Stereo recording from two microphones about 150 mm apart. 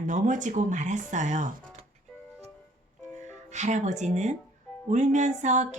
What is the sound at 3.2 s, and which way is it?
Speech, 50° right (ahead or behind).